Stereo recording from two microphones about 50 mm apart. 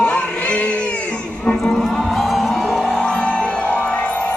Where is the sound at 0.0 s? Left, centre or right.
Left.